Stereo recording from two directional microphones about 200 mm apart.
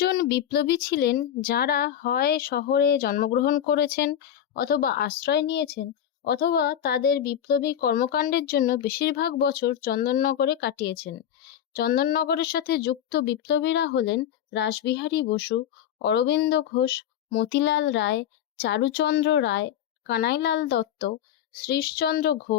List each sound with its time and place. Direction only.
0.0 s speech: 50° left (ahead or behind)